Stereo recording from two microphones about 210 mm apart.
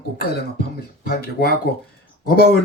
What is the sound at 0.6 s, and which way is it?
Speech, 45° left (ahead or behind).